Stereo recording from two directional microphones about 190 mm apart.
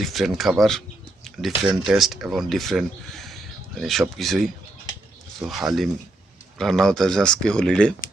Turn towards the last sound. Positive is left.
turn(degrees=5)  # may be behind; listen again after turning